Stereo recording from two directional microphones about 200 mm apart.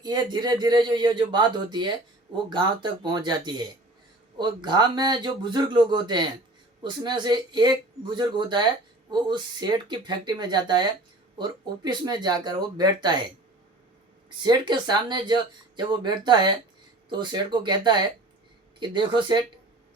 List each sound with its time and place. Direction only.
0.0 s speech: 20° right (ahead or behind)
14.3 s speech: 20° right (ahead or behind)